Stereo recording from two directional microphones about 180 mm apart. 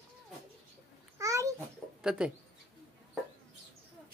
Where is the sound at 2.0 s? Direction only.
5° right (ahead or behind).